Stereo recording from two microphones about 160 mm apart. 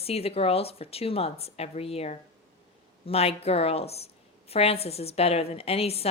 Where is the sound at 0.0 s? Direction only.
40° left (ahead or behind).